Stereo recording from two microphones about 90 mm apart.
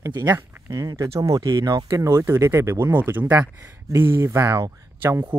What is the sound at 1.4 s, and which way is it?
Speech, 50° right (ahead or behind).